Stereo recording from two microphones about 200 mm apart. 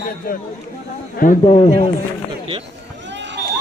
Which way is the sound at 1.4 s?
25° left (ahead or behind).